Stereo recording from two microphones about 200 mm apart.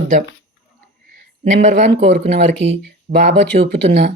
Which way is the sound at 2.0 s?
60° right (ahead or behind).